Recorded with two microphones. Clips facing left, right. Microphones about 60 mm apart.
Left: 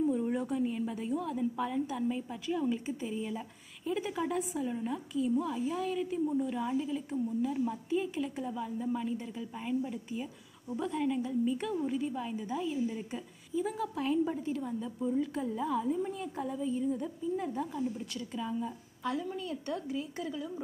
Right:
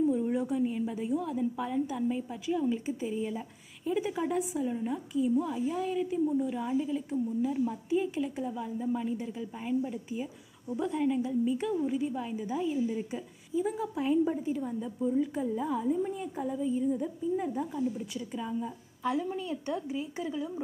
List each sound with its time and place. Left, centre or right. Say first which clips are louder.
0.0 s a woman's voice: right 3 dB; centre
19.0 s speech: right 4 dB; right